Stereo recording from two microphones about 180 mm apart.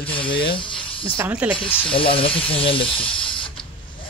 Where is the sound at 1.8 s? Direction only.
30° left (ahead or behind).